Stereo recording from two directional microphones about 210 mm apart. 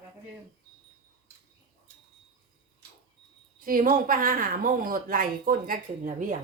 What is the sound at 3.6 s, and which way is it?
Speech, 40° right (ahead or behind).